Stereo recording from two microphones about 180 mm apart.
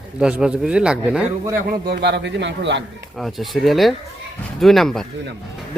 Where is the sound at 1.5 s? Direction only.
55° right (ahead or behind); by 2.9 s 80° right.